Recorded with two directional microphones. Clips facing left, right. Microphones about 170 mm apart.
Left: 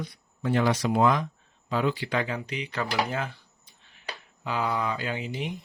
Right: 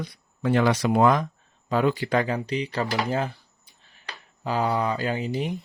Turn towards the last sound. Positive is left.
turn(degrees=-40)  # may be behind; listen again after turning